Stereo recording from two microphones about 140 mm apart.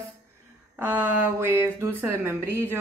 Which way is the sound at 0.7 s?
15° right (ahead or behind).